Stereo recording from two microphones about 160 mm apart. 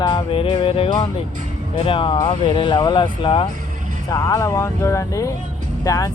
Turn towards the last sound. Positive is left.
turn(degrees=20)  # may be behind; listen again after turning